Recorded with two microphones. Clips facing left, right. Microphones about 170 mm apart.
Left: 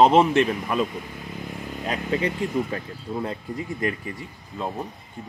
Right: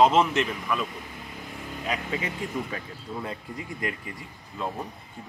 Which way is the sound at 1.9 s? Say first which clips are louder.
Left 6 dB; 45° left (ahead or behind).